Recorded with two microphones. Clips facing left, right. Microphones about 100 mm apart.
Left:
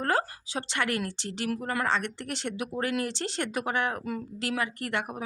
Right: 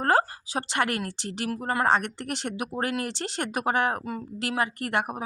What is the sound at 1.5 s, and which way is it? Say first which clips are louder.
Speech: right 3 dB; 35° right (ahead or behind).